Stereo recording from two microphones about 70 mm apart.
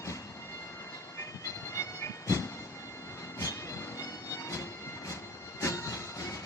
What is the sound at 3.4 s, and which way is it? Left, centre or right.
Music, left.